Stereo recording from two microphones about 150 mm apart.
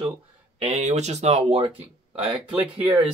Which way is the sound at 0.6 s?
50° right (ahead or behind).